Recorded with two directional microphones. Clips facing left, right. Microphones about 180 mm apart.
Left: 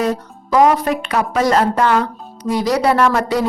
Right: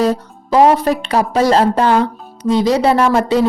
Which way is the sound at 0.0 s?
30° right (ahead or behind).